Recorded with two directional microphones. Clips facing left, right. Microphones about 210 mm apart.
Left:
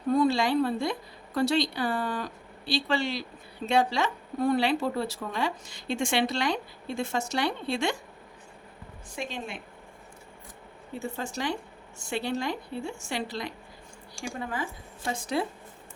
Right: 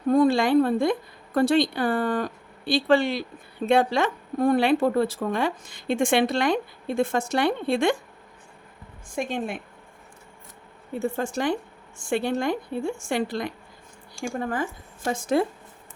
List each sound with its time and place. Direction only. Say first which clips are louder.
0.1 s a woman's voice: right 5 dB; 50° right (ahead or behind)
9.1 s a woman's voice: right 8 dB; 55° right (ahead or behind)
11.2 s a woman's voice: right 5 dB; 50° right (ahead or behind)